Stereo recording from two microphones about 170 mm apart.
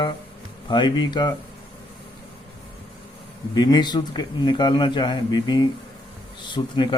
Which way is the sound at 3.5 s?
25° left (ahead or behind).